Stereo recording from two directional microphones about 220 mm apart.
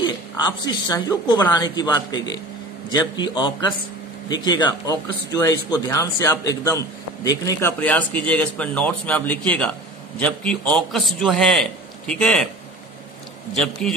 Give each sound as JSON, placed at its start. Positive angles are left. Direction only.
{"t": 0.0, "sound": "a man's voice", "side_deg": 20}
{"t": 13.6, "sound": "a man's voice", "side_deg": 0}